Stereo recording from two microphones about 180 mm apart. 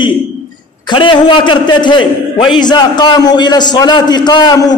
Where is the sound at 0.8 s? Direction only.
25° left (ahead or behind).